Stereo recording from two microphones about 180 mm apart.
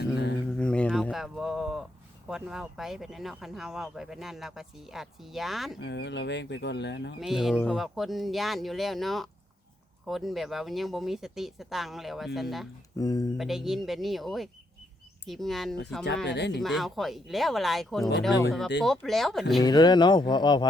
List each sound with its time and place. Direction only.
0.0 s a sound: 70° left (ahead or behind)
0.5 s a sound: 5° left (ahead or behind)
2.2 s speech: 5° right (ahead or behind)
5.8 s speech: 75° left (ahead or behind)
7.2 s speech: centre (ahead or behind)
13.0 s speech: 20° left (ahead or behind)
13.3 s speech: centre (ahead or behind)
16.2 s speech: 70° left (ahead or behind)
16.5 s speech: centre (ahead or behind)
19.6 s speech: 25° left (ahead or behind)